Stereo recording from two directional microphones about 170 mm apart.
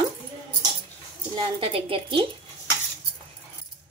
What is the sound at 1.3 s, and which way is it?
Speech, 30° right (ahead or behind).